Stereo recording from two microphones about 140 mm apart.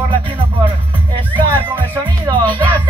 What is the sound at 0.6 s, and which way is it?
Speech, 35° right (ahead or behind).